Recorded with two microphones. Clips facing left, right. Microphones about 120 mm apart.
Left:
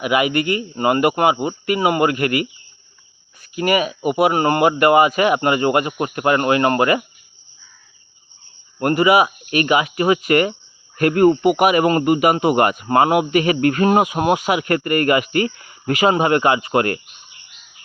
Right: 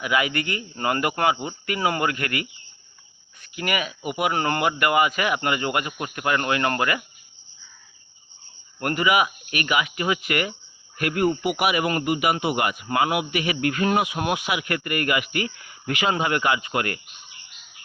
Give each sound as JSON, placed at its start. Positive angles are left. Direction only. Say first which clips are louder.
{"t": 0.0, "sound": "a man's voice", "louder": "left 6 dB", "side_deg": 25}
{"t": 3.5, "sound": "a man's voice", "louder": "left 9 dB", "side_deg": 25}
{"t": 8.8, "sound": "a man's voice", "louder": "left 7 dB", "side_deg": 30}